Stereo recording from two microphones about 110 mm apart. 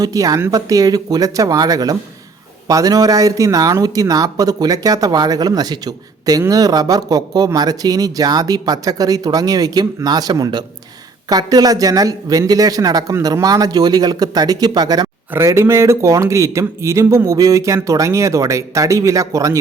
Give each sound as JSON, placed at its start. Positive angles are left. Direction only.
{"t": 0.0, "sound": "speech", "side_deg": -35}
{"t": 15.3, "sound": "speech", "side_deg": -25}